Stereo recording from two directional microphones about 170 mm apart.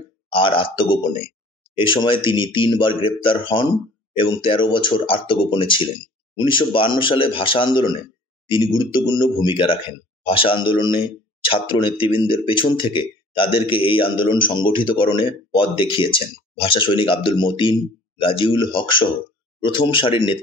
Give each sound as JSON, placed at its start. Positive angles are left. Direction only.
{"t": 0.3, "sound": "speech", "side_deg": 30}